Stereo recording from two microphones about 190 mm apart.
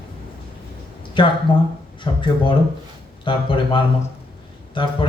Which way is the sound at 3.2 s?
25° left (ahead or behind).